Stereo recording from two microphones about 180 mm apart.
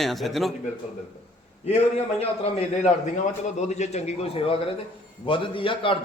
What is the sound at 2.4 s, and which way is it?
A man's voice, 35° left (ahead or behind).